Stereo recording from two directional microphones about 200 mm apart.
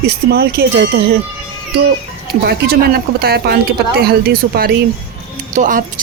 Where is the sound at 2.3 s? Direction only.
55° right (ahead or behind).